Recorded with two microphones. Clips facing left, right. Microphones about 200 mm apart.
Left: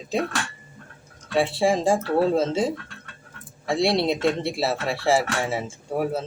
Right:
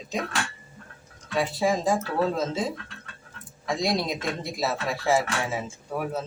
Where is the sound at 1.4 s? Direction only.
30° left (ahead or behind).